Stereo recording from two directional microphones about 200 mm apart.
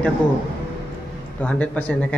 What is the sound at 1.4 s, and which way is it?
Speech, 5° left (ahead or behind).